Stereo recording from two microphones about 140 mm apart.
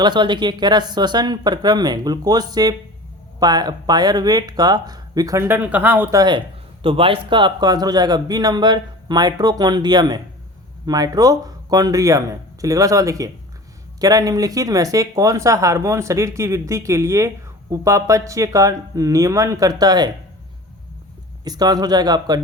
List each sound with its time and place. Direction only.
0.0 s speech: 30° right (ahead or behind); by 6.1 s 10° right (ahead or behind)
6.1 s speech: 30° right (ahead or behind)
6.8 s speech: 40° right (ahead or behind)
21.4 s speech: 30° right (ahead or behind)